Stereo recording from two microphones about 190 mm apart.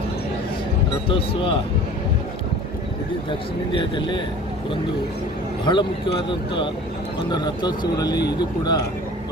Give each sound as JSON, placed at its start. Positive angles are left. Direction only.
{"t": 1.0, "sound": "speech", "side_deg": 25}
{"t": 3.2, "sound": "speech", "side_deg": 25}
{"t": 5.7, "sound": "speech", "side_deg": 25}
{"t": 7.3, "sound": "speech", "side_deg": 20}